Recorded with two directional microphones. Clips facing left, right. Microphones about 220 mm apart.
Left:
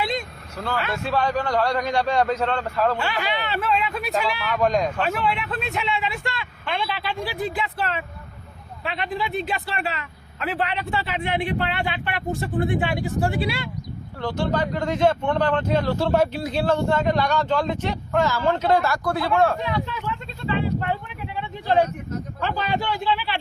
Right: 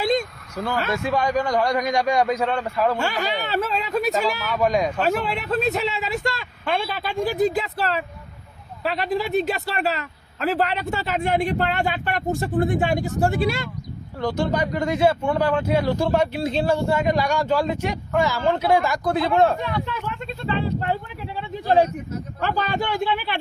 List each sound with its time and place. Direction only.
0.0 s vehicle: 45° right (ahead or behind)
1.0 s speech: 15° right (ahead or behind)
3.0 s speech: 45° right (ahead or behind)
4.6 s speech: 10° right (ahead or behind)
5.0 s speech: 40° right (ahead or behind)
14.2 s speech: 15° right (ahead or behind)
16.4 s speech: 25° right (ahead or behind)
16.6 s speech: 10° right (ahead or behind)
21.3 s a sound: 35° right (ahead or behind)
22.4 s speech: 45° right (ahead or behind)